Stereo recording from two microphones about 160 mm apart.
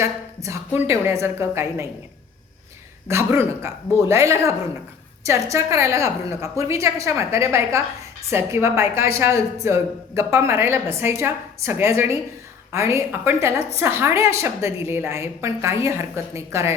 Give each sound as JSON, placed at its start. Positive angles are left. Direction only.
{"t": 0.0, "sound": "a woman's voice", "side_deg": -20}
{"t": 3.1, "sound": "a woman's voice", "side_deg": -15}